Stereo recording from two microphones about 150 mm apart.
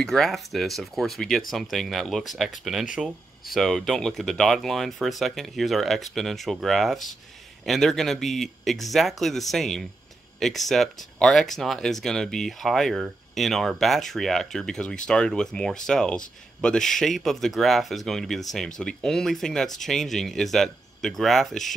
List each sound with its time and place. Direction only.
0.0 s speech: 5° left (ahead or behind)